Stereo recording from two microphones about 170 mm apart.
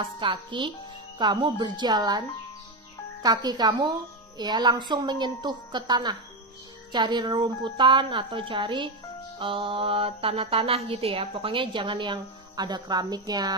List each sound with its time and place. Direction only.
0.0 s speech: 30° right (ahead or behind)